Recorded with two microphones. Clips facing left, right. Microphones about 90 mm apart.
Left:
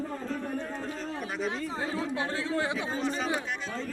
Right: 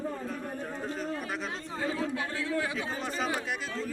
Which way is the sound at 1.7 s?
25° left (ahead or behind).